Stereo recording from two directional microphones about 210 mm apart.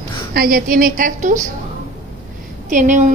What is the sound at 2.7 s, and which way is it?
Speech, 35° right (ahead or behind).